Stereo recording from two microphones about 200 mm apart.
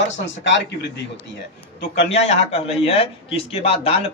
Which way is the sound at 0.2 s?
60° left (ahead or behind).